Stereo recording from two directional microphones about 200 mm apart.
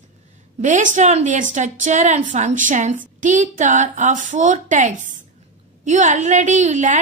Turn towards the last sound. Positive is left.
turn(degrees=-35)  # may be behind; listen again after turning